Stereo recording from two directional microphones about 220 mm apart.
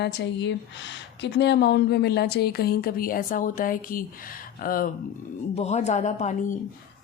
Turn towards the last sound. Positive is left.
turn(degrees=35)  # may be behind; listen again after turning